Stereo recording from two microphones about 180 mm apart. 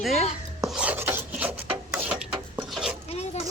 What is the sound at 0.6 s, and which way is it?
Filing, 5° right (ahead or behind).